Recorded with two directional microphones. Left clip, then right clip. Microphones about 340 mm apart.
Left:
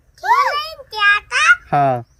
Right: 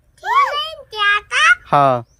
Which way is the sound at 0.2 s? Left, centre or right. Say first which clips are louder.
Left 1 dB; centre.